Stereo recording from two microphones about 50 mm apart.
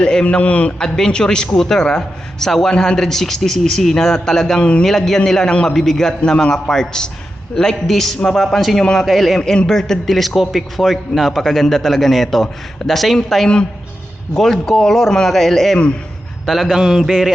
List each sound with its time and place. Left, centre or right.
0.0 s a man's voice: centre
0.8 s a man's voice: centre
9.4 s a man's voice: centre
14.3 s a man's voice: centre
16.5 s a man's voice: centre